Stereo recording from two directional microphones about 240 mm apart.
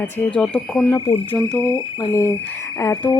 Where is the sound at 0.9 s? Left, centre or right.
Left.